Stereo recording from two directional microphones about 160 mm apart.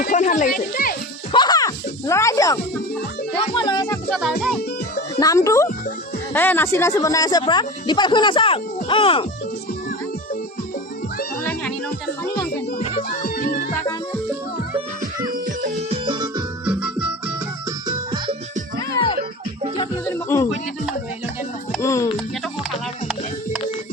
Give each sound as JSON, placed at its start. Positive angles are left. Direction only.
{"t": 0.0, "sound": "speech", "side_deg": 55}
{"t": 1.3, "sound": "music", "side_deg": 25}
{"t": 3.3, "sound": "speech", "side_deg": 30}
{"t": 4.1, "sound": "speech", "side_deg": 0}
{"t": 5.2, "sound": "speech", "side_deg": 20}
{"t": 12.8, "sound": "music", "side_deg": 40}
{"t": 13.1, "sound": "music", "side_deg": 65}
{"t": 15.3, "sound": "music", "side_deg": -55}
{"t": 15.9, "sound": "music", "side_deg": -30}
{"t": 16.6, "sound": "music", "side_deg": -10}
{"t": 17.7, "sound": "music", "side_deg": -30}
{"t": 20.1, "sound": "music", "side_deg": 15}
{"t": 21.8, "sound": "music", "side_deg": 20}
{"t": 23.0, "sound": "speech", "side_deg": -5}